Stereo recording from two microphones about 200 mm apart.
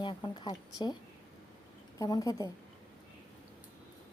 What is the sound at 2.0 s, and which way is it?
Speech, 20° left (ahead or behind).